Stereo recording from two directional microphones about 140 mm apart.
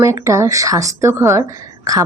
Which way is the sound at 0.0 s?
20° right (ahead or behind).